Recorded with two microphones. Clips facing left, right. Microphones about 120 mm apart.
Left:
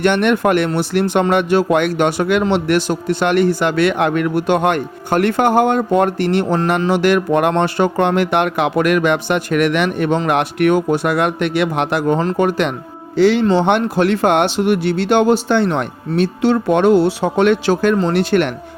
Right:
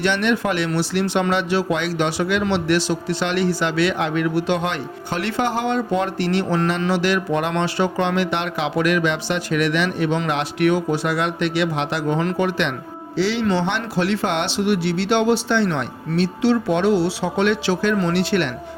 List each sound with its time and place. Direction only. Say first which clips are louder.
0.0 s speech: left 6 dB; 55° left (ahead or behind)